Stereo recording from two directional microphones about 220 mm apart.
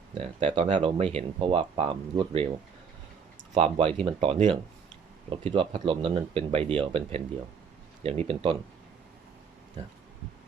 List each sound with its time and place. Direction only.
0.1 s speech: 25° right (ahead or behind)
3.5 s speech: 25° right (ahead or behind)